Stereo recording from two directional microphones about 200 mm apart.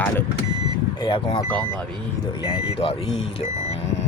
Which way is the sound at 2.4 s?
25° left (ahead or behind).